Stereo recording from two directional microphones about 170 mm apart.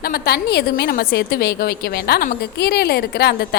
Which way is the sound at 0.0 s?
65° left (ahead or behind).